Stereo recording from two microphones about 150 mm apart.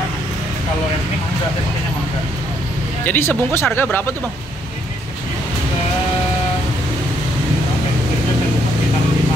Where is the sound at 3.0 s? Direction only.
10° left (ahead or behind).